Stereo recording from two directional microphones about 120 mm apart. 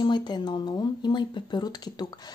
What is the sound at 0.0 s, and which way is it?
Speech, 40° left (ahead or behind).